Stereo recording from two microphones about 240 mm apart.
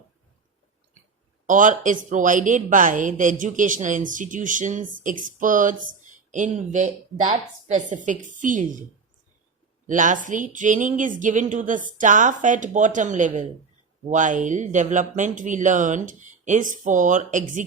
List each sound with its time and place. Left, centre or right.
1.5 s speech: right
9.8 s a woman's voice: right